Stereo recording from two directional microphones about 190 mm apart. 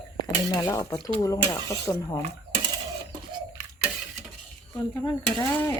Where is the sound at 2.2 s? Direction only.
30° right (ahead or behind).